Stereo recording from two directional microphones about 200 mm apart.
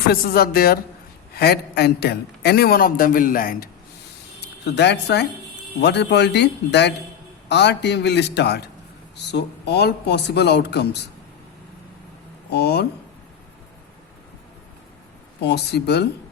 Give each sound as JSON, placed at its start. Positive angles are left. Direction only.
{"t": 0.1, "sound": "a man's voice", "side_deg": 50}
{"t": 4.4, "sound": "speech", "side_deg": 60}
{"t": 12.5, "sound": "speech", "side_deg": 55}
{"t": 15.4, "sound": "speech", "side_deg": 55}